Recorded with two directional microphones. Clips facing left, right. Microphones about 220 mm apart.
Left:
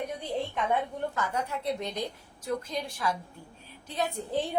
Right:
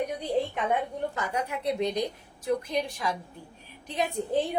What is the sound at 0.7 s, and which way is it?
A woman's voice, 15° right (ahead or behind).